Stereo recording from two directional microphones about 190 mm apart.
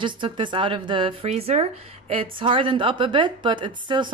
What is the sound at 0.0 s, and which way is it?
A woman's voice, 25° right (ahead or behind).